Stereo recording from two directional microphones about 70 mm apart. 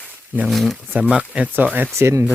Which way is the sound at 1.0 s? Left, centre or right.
Centre.